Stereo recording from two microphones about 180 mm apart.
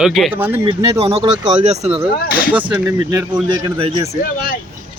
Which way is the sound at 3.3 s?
25° right (ahead or behind).